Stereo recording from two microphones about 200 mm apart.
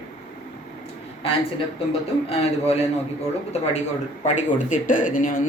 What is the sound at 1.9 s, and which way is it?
Speech, 30° left (ahead or behind).